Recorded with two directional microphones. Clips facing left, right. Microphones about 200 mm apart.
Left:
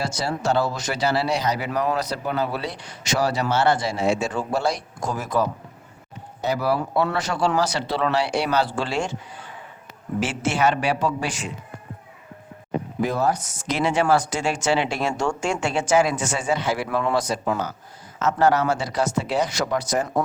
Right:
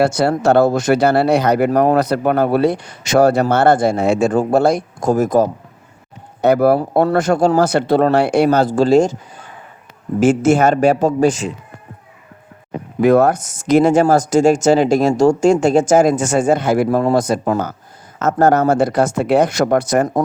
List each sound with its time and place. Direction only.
0.0 s speech: 55° right (ahead or behind)
6.4 s speech: 55° right (ahead or behind)
13.0 s speech: 65° right (ahead or behind)